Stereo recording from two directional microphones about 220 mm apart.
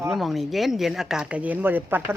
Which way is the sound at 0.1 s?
Centre (ahead or behind).